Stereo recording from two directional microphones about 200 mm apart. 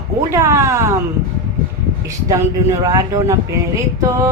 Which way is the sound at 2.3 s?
15° right (ahead or behind).